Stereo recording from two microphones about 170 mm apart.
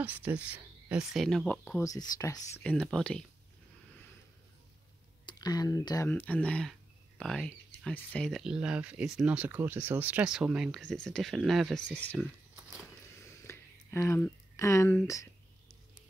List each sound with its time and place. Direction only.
0.0 s speech: 10° right (ahead or behind)
1.8 s speech: 20° left (ahead or behind)
2.6 s speech: 5° left (ahead or behind)
5.2 s speech: 25° left (ahead or behind)
13.5 s a sound: 15° left (ahead or behind)